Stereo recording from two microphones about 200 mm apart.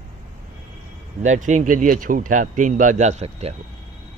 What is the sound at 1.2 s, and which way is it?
Speech, 40° right (ahead or behind).